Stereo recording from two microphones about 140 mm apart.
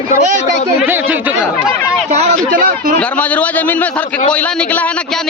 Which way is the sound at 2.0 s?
55° right (ahead or behind).